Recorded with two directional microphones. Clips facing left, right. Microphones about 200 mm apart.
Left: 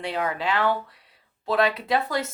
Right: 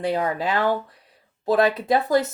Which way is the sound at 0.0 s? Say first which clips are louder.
Right 4 dB; 45° right (ahead or behind).